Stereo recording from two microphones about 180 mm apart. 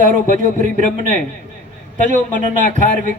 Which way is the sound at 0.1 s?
45° right (ahead or behind).